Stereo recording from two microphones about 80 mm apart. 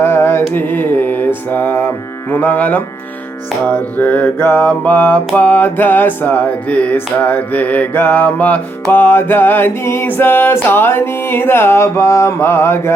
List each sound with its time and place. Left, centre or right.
0.0 s mantra: left
2.3 s music: left